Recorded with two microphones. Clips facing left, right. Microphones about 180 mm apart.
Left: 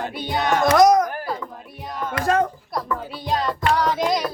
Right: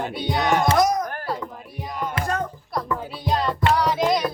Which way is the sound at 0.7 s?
80° left.